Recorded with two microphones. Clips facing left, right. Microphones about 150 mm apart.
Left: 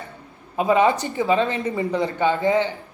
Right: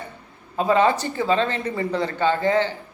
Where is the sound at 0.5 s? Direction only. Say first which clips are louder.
Left 1 dB; 15° left (ahead or behind).